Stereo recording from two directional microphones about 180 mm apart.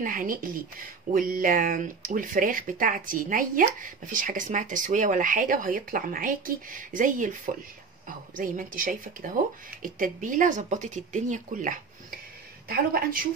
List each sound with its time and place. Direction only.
0.0 s speech: 50° right (ahead or behind)
8.4 s speech: 50° right (ahead or behind)